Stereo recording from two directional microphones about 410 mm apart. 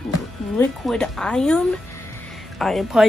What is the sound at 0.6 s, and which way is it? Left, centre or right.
A woman's voice, centre.